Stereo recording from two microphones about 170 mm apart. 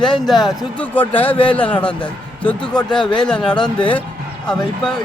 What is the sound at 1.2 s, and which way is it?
Speech, 30° left (ahead or behind).